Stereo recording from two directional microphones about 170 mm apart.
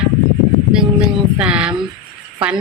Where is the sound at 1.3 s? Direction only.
5° right (ahead or behind).